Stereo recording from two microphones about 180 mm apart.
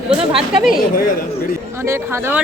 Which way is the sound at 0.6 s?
Centre (ahead or behind).